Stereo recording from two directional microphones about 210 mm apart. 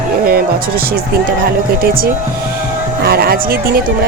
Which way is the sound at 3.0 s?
45° right (ahead or behind).